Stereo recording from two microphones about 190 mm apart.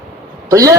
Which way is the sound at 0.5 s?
15° right (ahead or behind).